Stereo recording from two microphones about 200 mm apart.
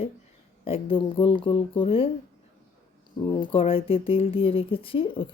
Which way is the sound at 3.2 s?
25° left (ahead or behind).